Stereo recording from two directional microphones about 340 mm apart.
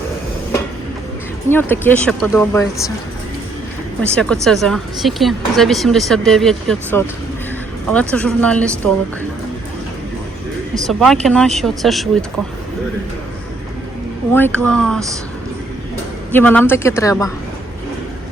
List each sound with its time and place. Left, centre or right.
1.5 s speech: centre
4.1 s speech: centre
10.8 s speech: centre
14.3 s speech: centre
16.3 s speech: centre